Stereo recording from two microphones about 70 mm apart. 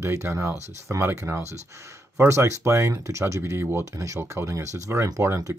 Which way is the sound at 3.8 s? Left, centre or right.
Right.